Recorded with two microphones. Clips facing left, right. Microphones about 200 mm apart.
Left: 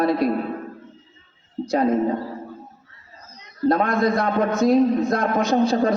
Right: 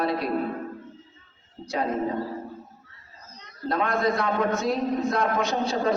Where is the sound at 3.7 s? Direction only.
45° left (ahead or behind).